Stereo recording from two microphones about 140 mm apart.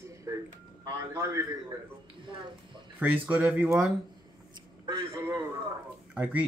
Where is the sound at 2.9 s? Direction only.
10° right (ahead or behind).